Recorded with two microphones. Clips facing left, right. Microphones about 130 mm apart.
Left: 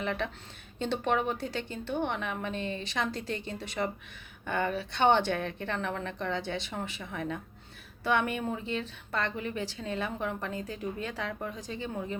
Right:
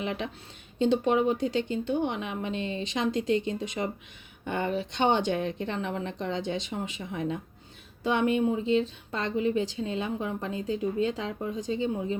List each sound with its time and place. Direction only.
0.0 s speech: 15° right (ahead or behind)